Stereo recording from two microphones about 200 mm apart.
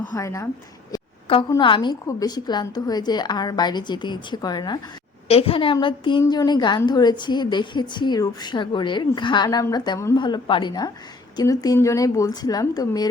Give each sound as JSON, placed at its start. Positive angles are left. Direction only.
{"t": 0.1, "sound": "a woman's voice", "side_deg": 15}
{"t": 0.9, "sound": "a sound", "side_deg": 25}
{"t": 1.5, "sound": "a woman's voice", "side_deg": 25}